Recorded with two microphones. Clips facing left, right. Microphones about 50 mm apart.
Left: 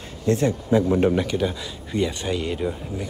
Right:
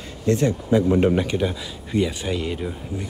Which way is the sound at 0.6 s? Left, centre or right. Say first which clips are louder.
Right 1 dB; centre.